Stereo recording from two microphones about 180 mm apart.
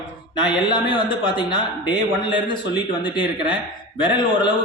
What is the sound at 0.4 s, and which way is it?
A man's voice, 25° left (ahead or behind).